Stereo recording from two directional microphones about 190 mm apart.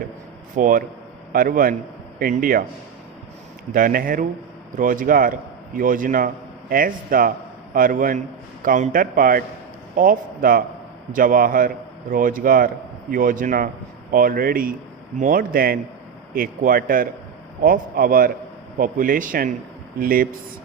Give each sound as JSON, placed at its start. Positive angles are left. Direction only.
{"t": 0.5, "sound": "a man's voice", "side_deg": -45}
{"t": 3.7, "sound": "a man's voice", "side_deg": -45}